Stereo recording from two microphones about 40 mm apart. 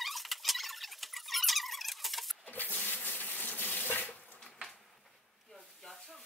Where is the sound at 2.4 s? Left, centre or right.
Left.